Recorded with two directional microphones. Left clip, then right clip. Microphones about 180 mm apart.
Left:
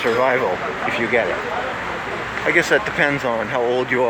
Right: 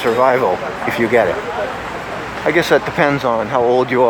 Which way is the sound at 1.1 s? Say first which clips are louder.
Right 6 dB; 20° right (ahead or behind).